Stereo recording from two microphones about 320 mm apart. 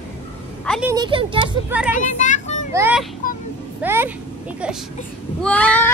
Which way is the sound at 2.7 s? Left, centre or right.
Centre.